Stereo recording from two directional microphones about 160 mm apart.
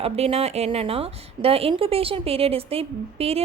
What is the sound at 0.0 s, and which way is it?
A woman's voice, 40° right (ahead or behind).